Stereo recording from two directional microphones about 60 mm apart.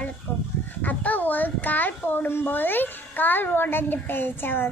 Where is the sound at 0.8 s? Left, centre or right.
Left.